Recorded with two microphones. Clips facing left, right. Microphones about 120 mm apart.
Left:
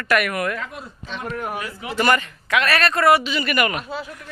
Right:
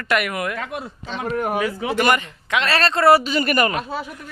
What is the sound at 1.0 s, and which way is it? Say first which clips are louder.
Speech: right 4 dB; 35° right (ahead or behind).